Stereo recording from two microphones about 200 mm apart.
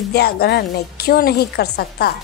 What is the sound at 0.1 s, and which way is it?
Speech, 55° left (ahead or behind).